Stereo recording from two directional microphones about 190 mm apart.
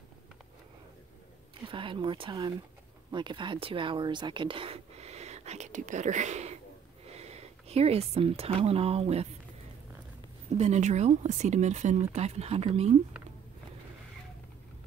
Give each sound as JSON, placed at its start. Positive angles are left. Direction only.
{"t": 1.7, "sound": "speech", "side_deg": -25}
{"t": 10.5, "sound": "speech", "side_deg": -35}